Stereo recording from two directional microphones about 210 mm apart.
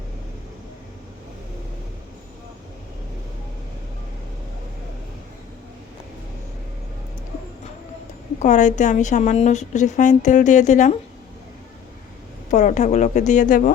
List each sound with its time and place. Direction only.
8.4 s a woman's voice: 35° left (ahead or behind)
12.5 s a woman's voice: 35° left (ahead or behind)